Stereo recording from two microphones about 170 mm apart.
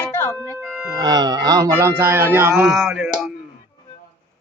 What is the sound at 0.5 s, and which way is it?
Music, 5° right (ahead or behind).